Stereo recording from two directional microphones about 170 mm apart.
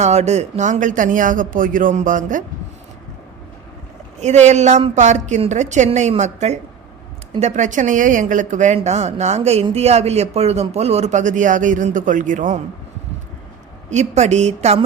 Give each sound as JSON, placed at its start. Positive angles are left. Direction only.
{"t": 0.0, "sound": "a woman's voice", "side_deg": -40}
{"t": 4.2, "sound": "a woman's voice", "side_deg": -40}
{"t": 13.9, "sound": "a woman's voice", "side_deg": -40}